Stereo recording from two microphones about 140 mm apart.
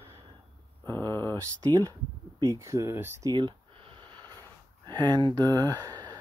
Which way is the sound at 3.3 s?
35° right (ahead or behind).